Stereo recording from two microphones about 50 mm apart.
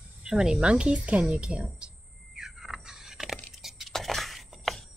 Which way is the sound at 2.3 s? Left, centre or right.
Centre.